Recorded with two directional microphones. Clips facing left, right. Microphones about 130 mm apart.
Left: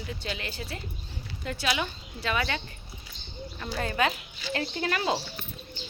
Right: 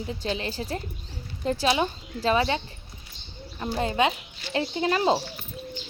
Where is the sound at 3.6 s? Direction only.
25° right (ahead or behind).